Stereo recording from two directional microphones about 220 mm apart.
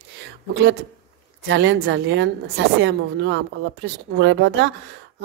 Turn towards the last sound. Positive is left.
turn(degrees=-55)  # may be behind; listen again after turning